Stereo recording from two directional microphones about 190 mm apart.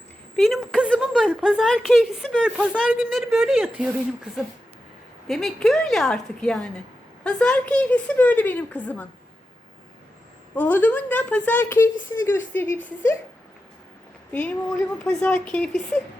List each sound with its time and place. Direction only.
0.3 s a woman's voice: centre (ahead or behind)
5.3 s a woman's voice: centre (ahead or behind)
10.5 s speech: 10° left (ahead or behind)
15.0 s a woman's voice: 5° left (ahead or behind)